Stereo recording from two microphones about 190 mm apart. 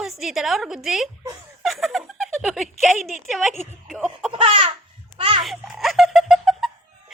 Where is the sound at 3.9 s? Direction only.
Centre (ahead or behind).